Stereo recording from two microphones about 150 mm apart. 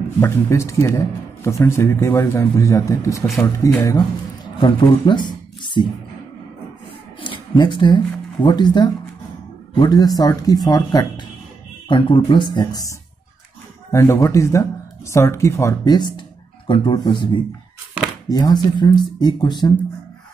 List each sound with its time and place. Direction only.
0.2 s speech: 20° left (ahead or behind)
4.6 s speech: 30° left (ahead or behind)
7.5 s speech: 30° left (ahead or behind)
13.9 s speech: 20° left (ahead or behind)